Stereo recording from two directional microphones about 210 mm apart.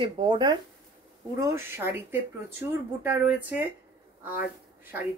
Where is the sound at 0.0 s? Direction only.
25° right (ahead or behind); by 3.6 s 10° right (ahead or behind).